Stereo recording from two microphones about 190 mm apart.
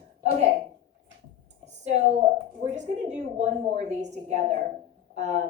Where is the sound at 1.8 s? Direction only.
35° right (ahead or behind).